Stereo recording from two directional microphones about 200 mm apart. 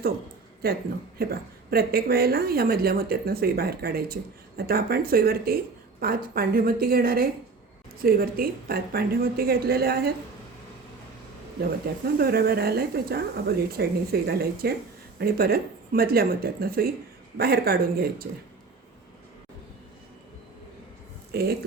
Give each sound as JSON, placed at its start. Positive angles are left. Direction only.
{"t": 0.6, "sound": "speech", "side_deg": -50}
{"t": 12.0, "sound": "speech", "side_deg": -50}
{"t": 21.3, "sound": "speech", "side_deg": -50}